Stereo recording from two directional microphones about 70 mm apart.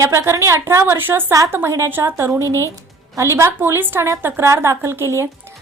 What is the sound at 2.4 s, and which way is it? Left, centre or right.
Speech, left.